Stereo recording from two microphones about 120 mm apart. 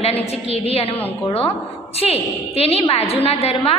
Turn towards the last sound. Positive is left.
turn(degrees=55)  # may be behind; listen again after turning